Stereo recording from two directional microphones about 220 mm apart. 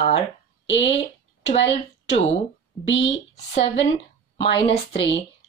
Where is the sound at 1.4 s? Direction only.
25° left (ahead or behind).